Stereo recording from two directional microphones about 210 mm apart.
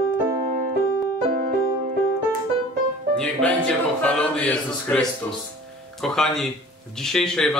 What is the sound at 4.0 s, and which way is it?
Speech, 5° left (ahead or behind).